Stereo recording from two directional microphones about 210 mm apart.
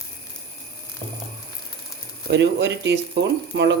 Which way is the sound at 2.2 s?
55° right (ahead or behind).